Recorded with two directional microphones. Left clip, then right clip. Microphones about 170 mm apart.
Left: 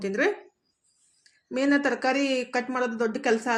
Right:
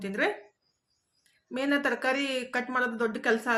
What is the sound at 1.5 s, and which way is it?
Speech, 15° left (ahead or behind).